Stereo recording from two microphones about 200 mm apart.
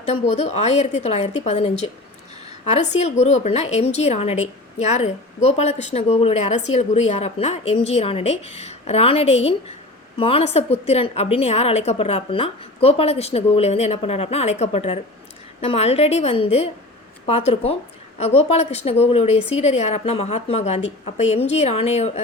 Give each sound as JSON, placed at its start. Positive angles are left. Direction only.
{"t": 0.0, "sound": "a woman's voice", "side_deg": 35}